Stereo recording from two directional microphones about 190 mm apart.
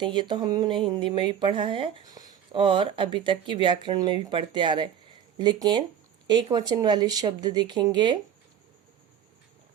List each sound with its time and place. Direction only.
0.0 s speech: 25° right (ahead or behind)